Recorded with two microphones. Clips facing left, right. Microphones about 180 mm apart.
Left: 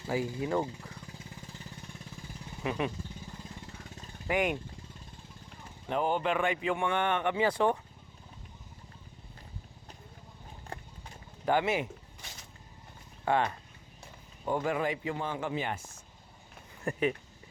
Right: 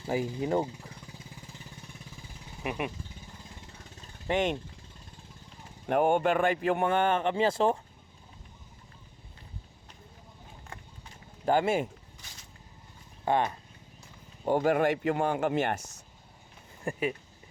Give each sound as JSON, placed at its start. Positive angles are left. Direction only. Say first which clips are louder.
{"t": 0.1, "sound": "speech", "louder": "right 2 dB", "side_deg": -25}
{"t": 2.6, "sound": "speech", "louder": "left 1 dB", "side_deg": -15}
{"t": 4.3, "sound": "speech", "louder": "right 2 dB", "side_deg": -25}
{"t": 5.9, "sound": "speech", "louder": "right 5 dB", "side_deg": -55}
{"t": 11.4, "sound": "speech", "louder": "right 3 dB", "side_deg": -45}
{"t": 13.2, "sound": "speech", "louder": "right 1 dB", "side_deg": -20}
{"t": 14.5, "sound": "speech", "louder": "right 6 dB", "side_deg": -65}
{"t": 16.8, "sound": "speech", "louder": "left 1 dB", "side_deg": -10}